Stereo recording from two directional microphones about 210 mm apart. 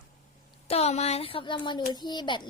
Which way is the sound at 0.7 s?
30° left (ahead or behind).